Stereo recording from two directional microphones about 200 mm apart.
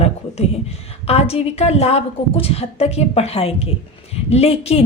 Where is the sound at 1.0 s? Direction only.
30° left (ahead or behind).